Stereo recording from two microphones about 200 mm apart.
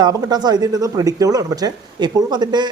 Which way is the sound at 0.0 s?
20° right (ahead or behind).